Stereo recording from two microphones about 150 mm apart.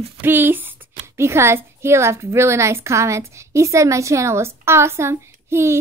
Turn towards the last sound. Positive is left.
turn(degrees=-15)  # may be behind; listen again after turning